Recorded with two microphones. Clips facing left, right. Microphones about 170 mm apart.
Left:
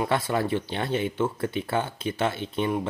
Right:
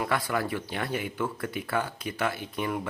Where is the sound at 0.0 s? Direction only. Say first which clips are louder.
Left 3 dB; 25° left (ahead or behind).